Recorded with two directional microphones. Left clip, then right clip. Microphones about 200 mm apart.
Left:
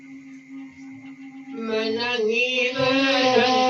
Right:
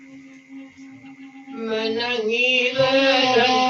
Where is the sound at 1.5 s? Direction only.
25° right (ahead or behind).